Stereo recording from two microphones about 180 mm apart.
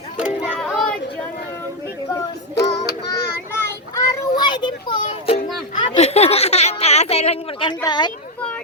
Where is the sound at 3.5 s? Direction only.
20° left (ahead or behind).